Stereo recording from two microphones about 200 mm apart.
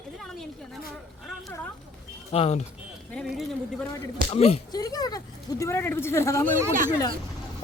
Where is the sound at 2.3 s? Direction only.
30° left (ahead or behind).